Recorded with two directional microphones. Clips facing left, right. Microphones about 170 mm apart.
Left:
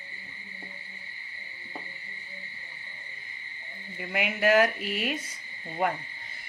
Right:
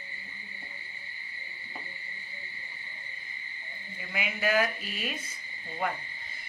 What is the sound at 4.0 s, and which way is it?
Speech, 65° left (ahead or behind).